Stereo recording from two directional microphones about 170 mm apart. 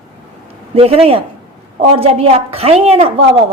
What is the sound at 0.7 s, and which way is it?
Speech, 35° right (ahead or behind).